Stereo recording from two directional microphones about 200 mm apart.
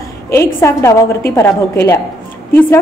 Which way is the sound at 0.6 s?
15° left (ahead or behind).